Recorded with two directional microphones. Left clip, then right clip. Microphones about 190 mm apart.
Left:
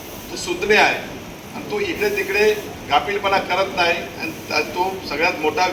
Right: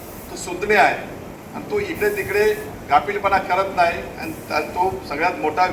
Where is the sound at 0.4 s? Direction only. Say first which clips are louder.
Left 1 dB; 65° right (ahead or behind).